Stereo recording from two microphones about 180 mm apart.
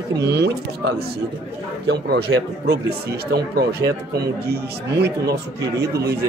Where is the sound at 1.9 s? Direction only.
65° right (ahead or behind).